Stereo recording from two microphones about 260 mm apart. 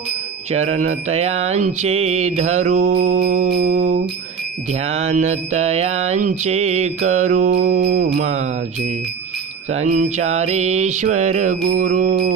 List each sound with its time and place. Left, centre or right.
0.5 s mantra: right
2.9 s music: right
4.8 s mantra: right
9.7 s mantra: right
11.6 s music: right